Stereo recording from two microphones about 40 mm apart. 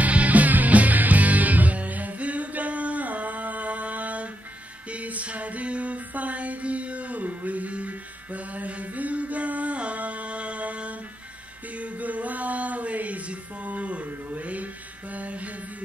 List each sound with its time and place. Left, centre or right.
0.0 s music: right